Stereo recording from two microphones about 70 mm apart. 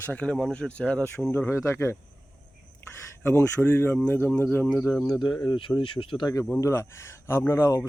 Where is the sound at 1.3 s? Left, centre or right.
Left.